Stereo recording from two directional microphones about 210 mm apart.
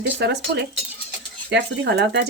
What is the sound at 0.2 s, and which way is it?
Speech, 50° right (ahead or behind).